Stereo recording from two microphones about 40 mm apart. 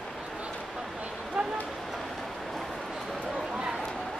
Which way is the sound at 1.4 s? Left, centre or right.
Centre.